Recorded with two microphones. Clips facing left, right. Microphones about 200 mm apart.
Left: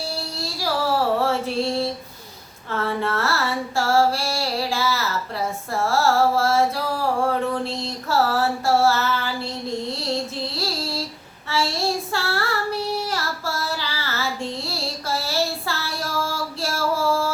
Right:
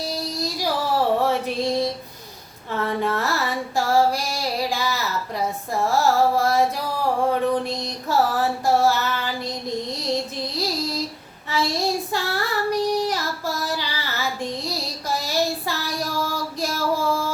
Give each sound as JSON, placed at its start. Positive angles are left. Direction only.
{"t": 0.0, "sound": "child singing", "side_deg": -15}
{"t": 1.2, "sound": "music", "side_deg": -15}
{"t": 2.6, "sound": "female singing", "side_deg": -15}
{"t": 5.7, "sound": "carnatic music", "side_deg": -15}
{"t": 7.3, "sound": "female singing", "side_deg": -15}
{"t": 11.4, "sound": "child singing", "side_deg": -15}